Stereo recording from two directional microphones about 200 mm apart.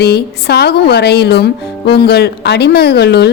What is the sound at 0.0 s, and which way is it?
A woman's voice, 55° left (ahead or behind).